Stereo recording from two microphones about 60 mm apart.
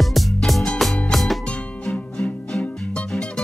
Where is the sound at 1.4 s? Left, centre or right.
Centre.